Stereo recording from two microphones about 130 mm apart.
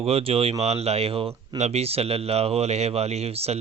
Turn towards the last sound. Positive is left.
turn(degrees=-50)  # may be behind; listen again after turning